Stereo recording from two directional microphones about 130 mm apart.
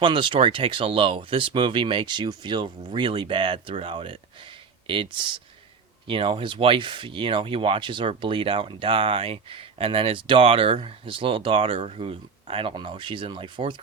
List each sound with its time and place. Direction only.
0.0 s speech: 40° right (ahead or behind)